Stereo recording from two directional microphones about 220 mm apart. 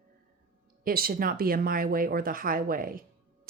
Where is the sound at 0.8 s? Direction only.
40° right (ahead or behind).